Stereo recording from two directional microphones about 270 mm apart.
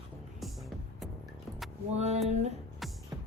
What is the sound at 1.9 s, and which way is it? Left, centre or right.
Speech, right.